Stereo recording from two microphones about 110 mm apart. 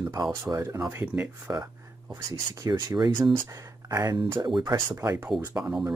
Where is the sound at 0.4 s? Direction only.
25° right (ahead or behind).